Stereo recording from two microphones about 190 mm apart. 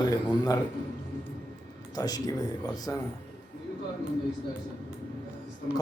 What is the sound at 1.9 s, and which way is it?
Speech, 20° left (ahead or behind).